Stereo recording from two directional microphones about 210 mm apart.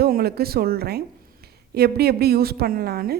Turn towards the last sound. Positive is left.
turn(degrees=-50)  # may be behind; listen again after turning